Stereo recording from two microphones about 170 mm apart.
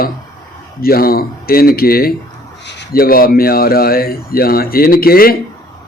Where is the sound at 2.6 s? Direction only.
90° left.